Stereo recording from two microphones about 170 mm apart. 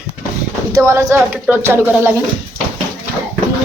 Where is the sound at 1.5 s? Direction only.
10° right (ahead or behind).